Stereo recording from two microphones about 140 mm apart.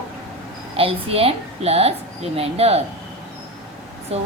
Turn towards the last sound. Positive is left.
turn(degrees=-45)  # may be behind; listen again after turning